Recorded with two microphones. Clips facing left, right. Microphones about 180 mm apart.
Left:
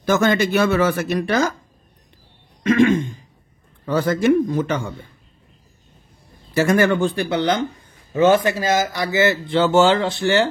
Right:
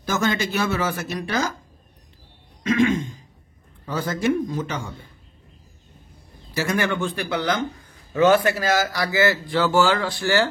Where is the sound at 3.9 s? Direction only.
60° left (ahead or behind).